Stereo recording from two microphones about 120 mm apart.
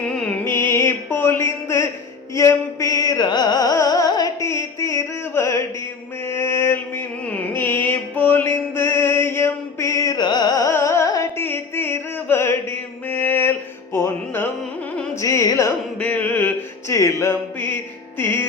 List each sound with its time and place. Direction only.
0.0 s music: 5° left (ahead or behind)
0.4 s music: 20° left (ahead or behind)
16.0 s music: 15° left (ahead or behind)